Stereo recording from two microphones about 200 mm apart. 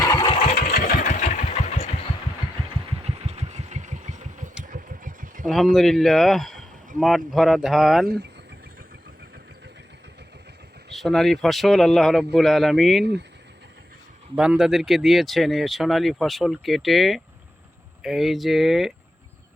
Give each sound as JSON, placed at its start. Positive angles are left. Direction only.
{"t": 0.0, "sound": "engine", "side_deg": 20}
{"t": 0.5, "sound": "engine", "side_deg": 45}
{"t": 3.0, "sound": "vehicle", "side_deg": -30}
{"t": 5.7, "sound": "speech", "side_deg": 0}
{"t": 8.0, "sound": "speech", "side_deg": -50}
{"t": 10.9, "sound": "speech", "side_deg": 0}
{"t": 14.3, "sound": "speech", "side_deg": -5}